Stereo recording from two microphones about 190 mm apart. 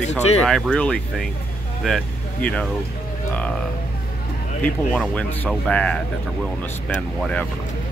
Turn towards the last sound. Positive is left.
turn(degrees=5)  # may be behind; listen again after turning